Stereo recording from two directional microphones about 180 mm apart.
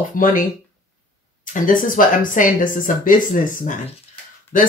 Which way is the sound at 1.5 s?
50° left (ahead or behind).